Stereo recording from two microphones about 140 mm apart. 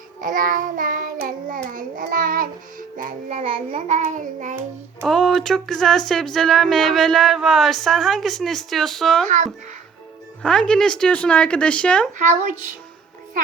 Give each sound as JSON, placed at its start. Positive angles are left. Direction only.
{"t": 0.2, "sound": "child singing", "side_deg": -75}
{"t": 3.4, "sound": "child singing", "side_deg": -40}
{"t": 3.8, "sound": "child singing", "side_deg": -55}
{"t": 5.0, "sound": "speech", "side_deg": 0}
{"t": 9.2, "sound": "child singing", "side_deg": -60}
{"t": 10.4, "sound": "speech", "side_deg": 10}
{"t": 12.1, "sound": "child singing", "side_deg": -60}